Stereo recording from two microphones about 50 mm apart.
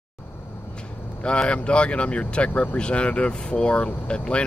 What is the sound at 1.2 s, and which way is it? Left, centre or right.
Speech, left.